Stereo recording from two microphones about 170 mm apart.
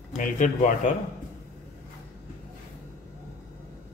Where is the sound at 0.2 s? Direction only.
50° left (ahead or behind).